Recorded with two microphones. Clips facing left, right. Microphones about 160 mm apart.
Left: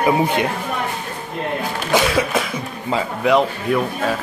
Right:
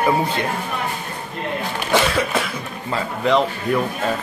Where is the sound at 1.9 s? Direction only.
15° left (ahead or behind).